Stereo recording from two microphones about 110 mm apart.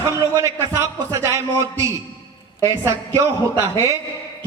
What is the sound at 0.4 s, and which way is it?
A man's voice, 25° right (ahead or behind).